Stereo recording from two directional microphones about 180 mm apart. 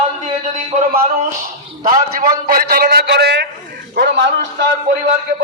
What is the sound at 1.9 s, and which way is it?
A man's voice, 50° right (ahead or behind).